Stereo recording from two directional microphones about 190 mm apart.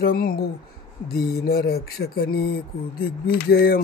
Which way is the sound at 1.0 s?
55° left (ahead or behind).